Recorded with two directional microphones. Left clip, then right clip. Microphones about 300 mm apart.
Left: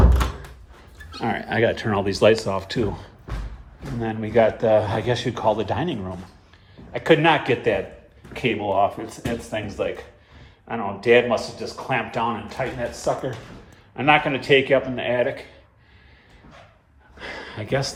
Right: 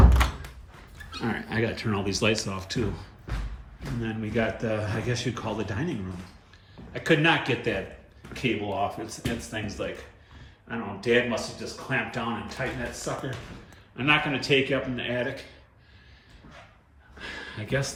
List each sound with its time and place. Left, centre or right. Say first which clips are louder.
0.2 s door: even; centre
0.9 s dog: left 6 dB; centre
1.5 s speech: left 10 dB; left
1.8 s speech: left 9 dB; centre
6.9 s a man's voice: left 6 dB; centre
17.2 s speech: left 4 dB; centre